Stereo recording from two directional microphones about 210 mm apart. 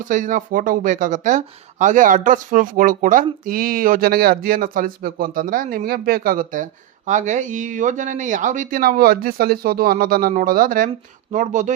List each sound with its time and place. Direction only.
0.0 s speech: 40° right (ahead or behind)